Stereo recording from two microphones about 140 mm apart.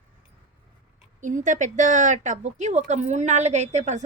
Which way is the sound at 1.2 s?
65° right (ahead or behind).